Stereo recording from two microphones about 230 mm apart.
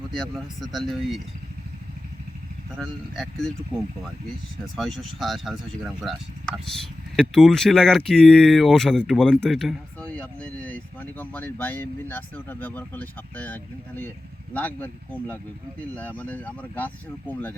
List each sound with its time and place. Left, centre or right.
0.2 s speech: centre
2.7 s speech: centre
4.8 s speech: centre
7.2 s speech: centre